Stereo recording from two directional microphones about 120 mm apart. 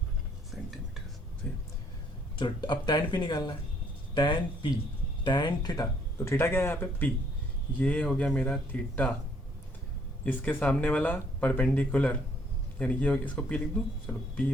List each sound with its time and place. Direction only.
0.5 s whispering: centre (ahead or behind)
1.4 s speech: 10° left (ahead or behind)
2.4 s speech: 40° left (ahead or behind); by 9.1 s 10° left (ahead or behind)
10.2 s speech: 15° left (ahead or behind)